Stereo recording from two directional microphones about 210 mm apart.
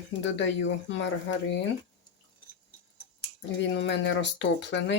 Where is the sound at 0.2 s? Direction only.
60° left (ahead or behind).